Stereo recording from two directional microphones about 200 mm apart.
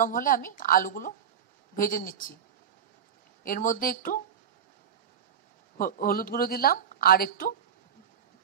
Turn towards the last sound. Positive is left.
turn(degrees=45)  # may be behind; listen again after turning